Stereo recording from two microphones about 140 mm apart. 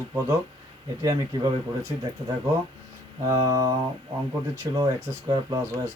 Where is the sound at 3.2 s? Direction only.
25° right (ahead or behind).